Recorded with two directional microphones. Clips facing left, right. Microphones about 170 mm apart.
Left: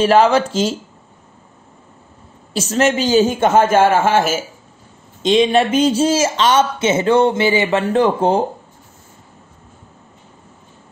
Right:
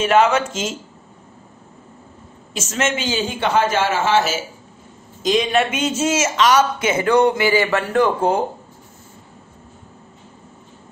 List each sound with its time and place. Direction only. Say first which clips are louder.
0.0 s speech: left 3 dB; 30° left (ahead or behind)
2.5 s a man's voice: left 6 dB; 35° left (ahead or behind); by 4.4 s 50° left (ahead or behind)
5.2 s speech: left 4 dB; 30° left (ahead or behind)